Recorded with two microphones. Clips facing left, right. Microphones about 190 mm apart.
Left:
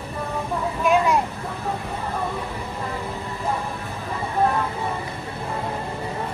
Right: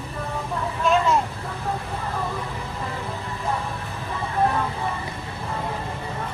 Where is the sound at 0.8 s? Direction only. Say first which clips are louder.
Left 1 dB; 15° left (ahead or behind).